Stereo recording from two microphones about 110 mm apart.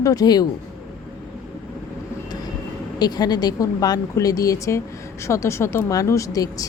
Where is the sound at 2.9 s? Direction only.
40° left (ahead or behind).